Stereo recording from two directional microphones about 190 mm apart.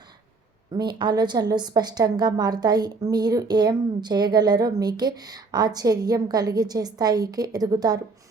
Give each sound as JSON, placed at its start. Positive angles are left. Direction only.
{"t": 0.7, "sound": "a woman's voice", "side_deg": -25}